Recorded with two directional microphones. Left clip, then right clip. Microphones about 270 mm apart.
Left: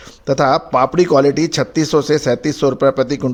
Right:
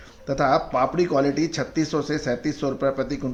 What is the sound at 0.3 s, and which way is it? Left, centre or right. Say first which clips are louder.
Speech: left 7 dB; left.